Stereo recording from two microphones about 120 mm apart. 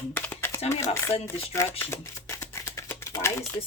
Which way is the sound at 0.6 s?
60° left (ahead or behind).